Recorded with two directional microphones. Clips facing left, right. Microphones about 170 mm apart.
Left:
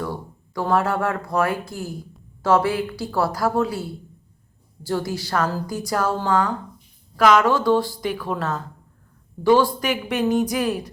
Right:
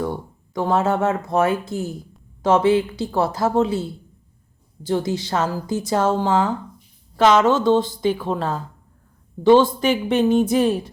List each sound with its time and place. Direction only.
0.0 s a woman's voice: 20° right (ahead or behind)